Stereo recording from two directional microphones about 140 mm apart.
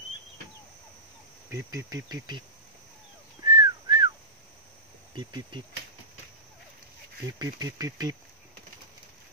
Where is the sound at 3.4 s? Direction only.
30° right (ahead or behind).